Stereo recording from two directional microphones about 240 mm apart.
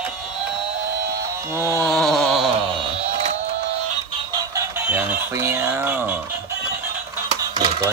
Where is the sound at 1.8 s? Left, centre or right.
Centre.